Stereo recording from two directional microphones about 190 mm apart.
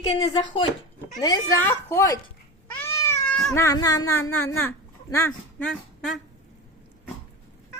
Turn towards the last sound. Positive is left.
turn(degrees=5)  # may be behind; listen again after turning